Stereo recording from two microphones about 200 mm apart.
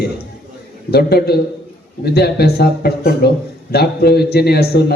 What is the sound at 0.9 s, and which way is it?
A man's voice, 55° left (ahead or behind).